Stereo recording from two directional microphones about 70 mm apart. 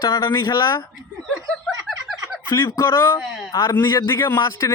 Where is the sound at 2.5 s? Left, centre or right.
Left.